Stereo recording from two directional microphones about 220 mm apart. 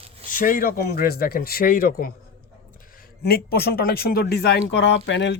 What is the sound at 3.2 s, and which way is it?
Speech, 45° left (ahead or behind).